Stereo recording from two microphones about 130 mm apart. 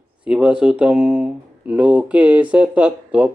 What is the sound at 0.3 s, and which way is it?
Speech, 5° right (ahead or behind).